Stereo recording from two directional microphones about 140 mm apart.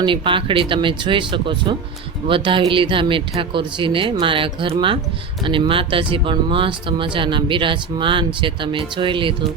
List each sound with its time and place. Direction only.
0.0 s speech: 35° right (ahead or behind)